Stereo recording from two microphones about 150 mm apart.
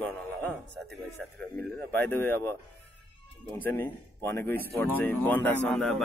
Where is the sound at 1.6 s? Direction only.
10° left (ahead or behind).